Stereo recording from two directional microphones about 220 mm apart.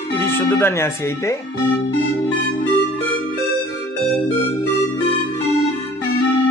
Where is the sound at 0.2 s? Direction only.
10° left (ahead or behind).